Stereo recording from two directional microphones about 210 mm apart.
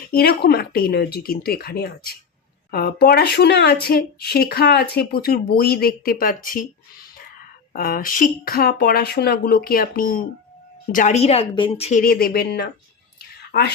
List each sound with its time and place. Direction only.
0.1 s speech: 45° left (ahead or behind)
7.7 s speech: 40° left (ahead or behind)